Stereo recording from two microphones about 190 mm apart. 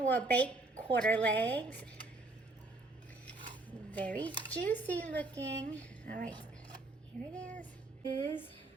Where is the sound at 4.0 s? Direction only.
10° left (ahead or behind).